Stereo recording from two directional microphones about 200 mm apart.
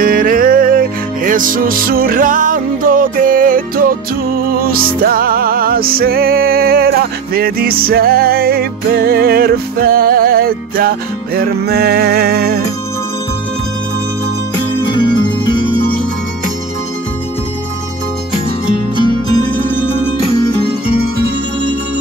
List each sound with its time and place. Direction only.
0.0 s music: 45° right (ahead or behind)